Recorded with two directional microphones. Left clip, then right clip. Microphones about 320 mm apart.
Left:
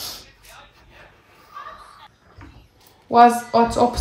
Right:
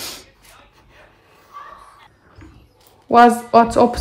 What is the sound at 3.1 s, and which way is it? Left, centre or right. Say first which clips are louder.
Speech: right 2 dB; right.